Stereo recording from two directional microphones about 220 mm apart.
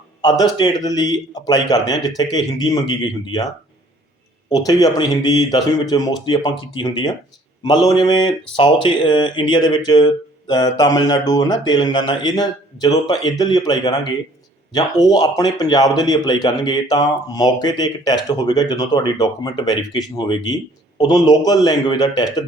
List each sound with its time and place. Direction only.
0.2 s a man's voice: 20° left (ahead or behind)
4.5 s speech: 15° left (ahead or behind)